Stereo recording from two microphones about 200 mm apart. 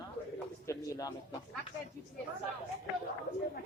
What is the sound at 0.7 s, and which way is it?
Speech, 15° left (ahead or behind).